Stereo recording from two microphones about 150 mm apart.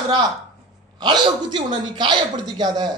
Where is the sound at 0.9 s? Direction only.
30° right (ahead or behind).